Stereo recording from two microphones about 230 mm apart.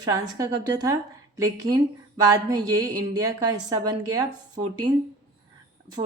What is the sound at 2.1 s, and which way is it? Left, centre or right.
A woman's voice, centre.